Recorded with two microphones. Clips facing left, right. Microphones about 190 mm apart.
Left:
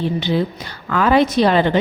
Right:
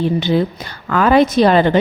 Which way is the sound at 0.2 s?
45° right (ahead or behind).